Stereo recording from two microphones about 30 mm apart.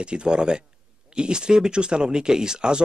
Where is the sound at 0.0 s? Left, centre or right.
Right.